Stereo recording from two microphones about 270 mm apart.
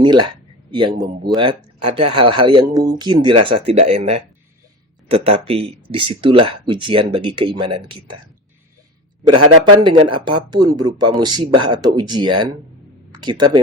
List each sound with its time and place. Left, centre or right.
0.0 s a sound: centre
1.4 s speech: centre
9.8 s speech: centre